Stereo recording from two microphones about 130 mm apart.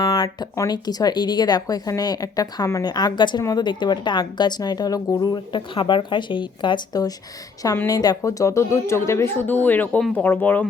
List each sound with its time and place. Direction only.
0.0 s speech: 30° left (ahead or behind); by 10.0 s 15° left (ahead or behind)
10.0 s speech: 5° left (ahead or behind)
10.2 s speech: 15° left (ahead or behind)